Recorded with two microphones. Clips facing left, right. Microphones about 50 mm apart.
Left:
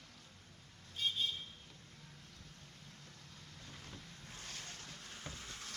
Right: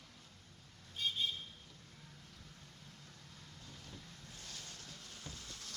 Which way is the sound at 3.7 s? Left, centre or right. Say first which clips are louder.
Left 1 dB; left.